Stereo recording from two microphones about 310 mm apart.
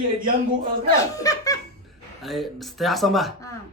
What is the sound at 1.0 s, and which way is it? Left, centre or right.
Speech, centre.